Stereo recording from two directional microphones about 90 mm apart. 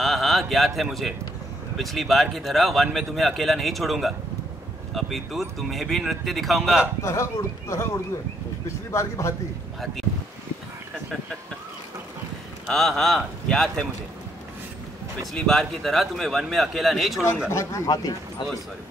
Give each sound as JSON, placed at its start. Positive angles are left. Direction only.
{"t": 0.0, "sound": "a man's voice", "side_deg": 0}
{"t": 7.0, "sound": "a man's voice", "side_deg": 30}
{"t": 8.9, "sound": "a man's voice", "side_deg": 30}
{"t": 12.6, "sound": "a man's voice", "side_deg": 5}
{"t": 15.3, "sound": "a man's voice", "side_deg": 5}
{"t": 17.5, "sound": "a man's voice", "side_deg": 35}